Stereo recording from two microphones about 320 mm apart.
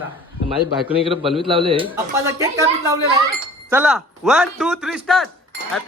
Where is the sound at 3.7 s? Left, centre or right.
Centre.